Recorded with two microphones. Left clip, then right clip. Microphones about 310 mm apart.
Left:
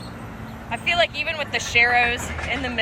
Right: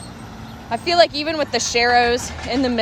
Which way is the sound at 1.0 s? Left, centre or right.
Right.